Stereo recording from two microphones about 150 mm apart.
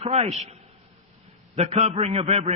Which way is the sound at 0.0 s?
45° right (ahead or behind).